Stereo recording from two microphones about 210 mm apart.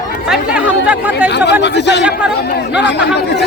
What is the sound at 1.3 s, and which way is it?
Speech, 55° left (ahead or behind).